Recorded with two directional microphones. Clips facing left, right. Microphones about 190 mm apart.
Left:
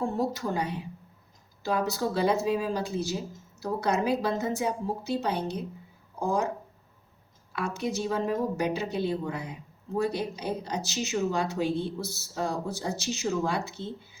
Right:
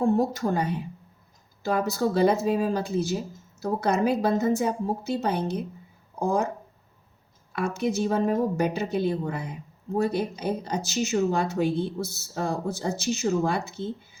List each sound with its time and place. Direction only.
0.0 s a woman's voice: 50° right (ahead or behind)
7.5 s a woman's voice: 50° right (ahead or behind)